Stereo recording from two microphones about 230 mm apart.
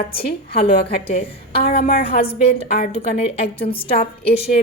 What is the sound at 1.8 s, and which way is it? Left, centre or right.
Speech, left.